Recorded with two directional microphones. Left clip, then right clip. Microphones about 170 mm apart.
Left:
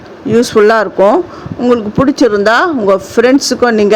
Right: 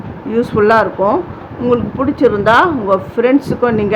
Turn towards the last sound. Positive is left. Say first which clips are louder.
# left 4 dB
turn(degrees=50)  # may be behind; listen again after turning